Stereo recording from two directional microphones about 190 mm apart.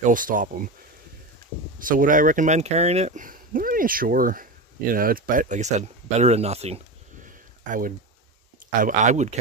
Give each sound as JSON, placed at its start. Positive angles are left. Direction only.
{"t": 0.0, "sound": "speech", "side_deg": -45}
{"t": 1.8, "sound": "speech", "side_deg": -45}
{"t": 7.2, "sound": "a sound", "side_deg": -45}
{"t": 8.8, "sound": "speech", "side_deg": -40}